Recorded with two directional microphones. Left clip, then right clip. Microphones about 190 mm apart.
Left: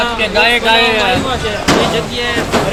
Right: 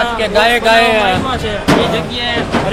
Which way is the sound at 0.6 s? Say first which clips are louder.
Right 1 dB; 55° right (ahead or behind).